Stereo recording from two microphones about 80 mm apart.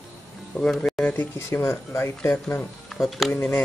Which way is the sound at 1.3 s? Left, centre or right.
Left.